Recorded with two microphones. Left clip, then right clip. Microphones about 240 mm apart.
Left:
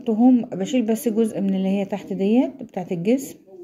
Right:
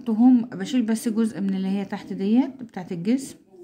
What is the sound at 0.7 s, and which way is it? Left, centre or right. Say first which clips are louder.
A woman's voice: left 4 dB; right.